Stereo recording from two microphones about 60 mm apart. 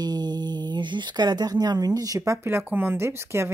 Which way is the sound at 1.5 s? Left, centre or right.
Right.